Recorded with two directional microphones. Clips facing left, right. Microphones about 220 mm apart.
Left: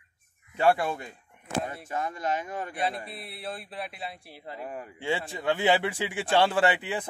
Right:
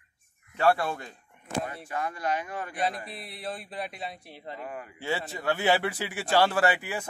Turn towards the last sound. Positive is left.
turn(degrees=20)  # may be behind; listen again after turning